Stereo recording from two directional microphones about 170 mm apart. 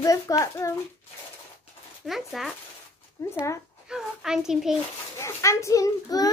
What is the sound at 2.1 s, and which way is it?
Speech, centre (ahead or behind).